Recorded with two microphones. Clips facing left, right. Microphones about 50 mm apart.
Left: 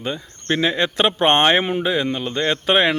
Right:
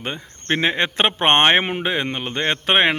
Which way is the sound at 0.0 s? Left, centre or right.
Right.